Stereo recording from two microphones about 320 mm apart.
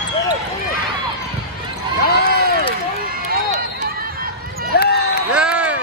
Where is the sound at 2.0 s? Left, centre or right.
Left.